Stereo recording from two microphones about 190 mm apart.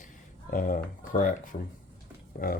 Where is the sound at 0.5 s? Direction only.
45° left (ahead or behind).